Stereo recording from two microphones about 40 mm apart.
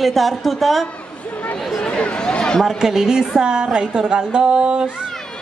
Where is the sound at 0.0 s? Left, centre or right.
Centre.